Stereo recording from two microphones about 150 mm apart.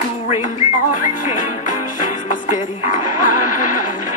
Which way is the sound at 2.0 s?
60° left (ahead or behind).